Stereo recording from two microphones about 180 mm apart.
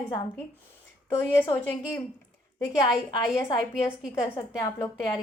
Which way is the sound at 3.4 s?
15° left (ahead or behind).